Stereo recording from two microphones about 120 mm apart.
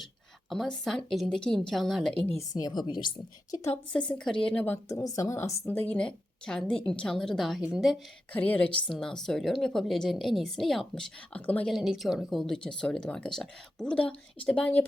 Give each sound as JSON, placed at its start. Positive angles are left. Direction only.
{"t": 0.5, "sound": "speech", "side_deg": 0}
{"t": 2.5, "sound": "speech", "side_deg": 35}
{"t": 3.5, "sound": "a woman's voice", "side_deg": 25}
{"t": 3.9, "sound": "a woman's voice", "side_deg": 10}
{"t": 5.0, "sound": "a woman's voice", "side_deg": 25}
{"t": 5.7, "sound": "a woman's voice", "side_deg": 15}
{"t": 8.3, "sound": "a woman's voice", "side_deg": 10}
{"t": 11.7, "sound": "speech", "side_deg": 0}